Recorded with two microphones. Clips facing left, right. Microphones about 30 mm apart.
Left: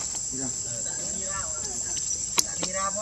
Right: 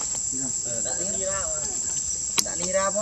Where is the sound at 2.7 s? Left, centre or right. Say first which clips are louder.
Right 6 dB; right.